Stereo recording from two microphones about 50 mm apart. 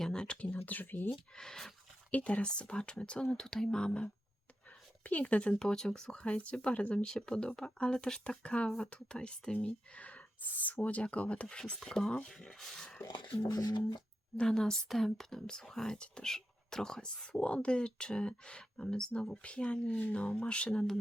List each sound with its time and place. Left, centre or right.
0.0 s a sound: centre
0.4 s speech: left
1.4 s speech: centre
2.0 s speech: left
5.5 s speech: centre; by 7.0 s left
7.0 s speech: centre
13.0 s speech: left
14.4 s speech: centre